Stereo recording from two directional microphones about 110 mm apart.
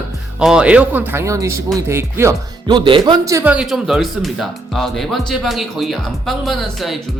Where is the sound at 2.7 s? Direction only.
50° right (ahead or behind).